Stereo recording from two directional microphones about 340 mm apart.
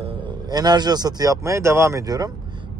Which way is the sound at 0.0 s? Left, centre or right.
Centre.